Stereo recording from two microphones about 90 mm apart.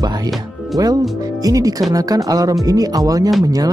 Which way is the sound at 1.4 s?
40° right (ahead or behind).